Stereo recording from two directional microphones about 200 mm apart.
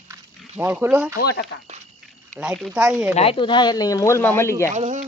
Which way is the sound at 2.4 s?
5° right (ahead or behind).